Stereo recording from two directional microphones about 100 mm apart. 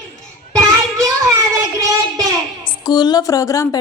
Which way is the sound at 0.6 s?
35° right (ahead or behind).